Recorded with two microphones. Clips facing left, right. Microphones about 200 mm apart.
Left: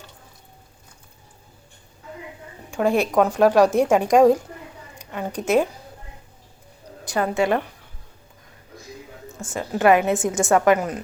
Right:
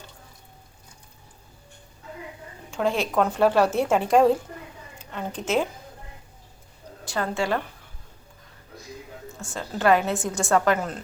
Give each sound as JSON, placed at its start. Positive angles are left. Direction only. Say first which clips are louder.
{"t": 2.6, "sound": "a woman's voice", "louder": "left 5 dB", "side_deg": 15}
{"t": 7.0, "sound": "a woman's voice", "louder": "left 5 dB", "side_deg": 15}
{"t": 9.4, "sound": "a woman's voice", "louder": "left 5 dB", "side_deg": 20}